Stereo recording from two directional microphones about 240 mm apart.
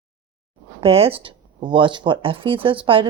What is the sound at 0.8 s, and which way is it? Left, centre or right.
Speech, right.